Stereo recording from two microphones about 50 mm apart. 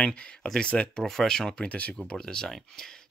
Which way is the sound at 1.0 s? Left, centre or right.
Centre.